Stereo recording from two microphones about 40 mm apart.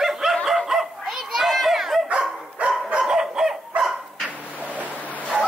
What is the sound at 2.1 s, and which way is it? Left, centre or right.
Dog, right.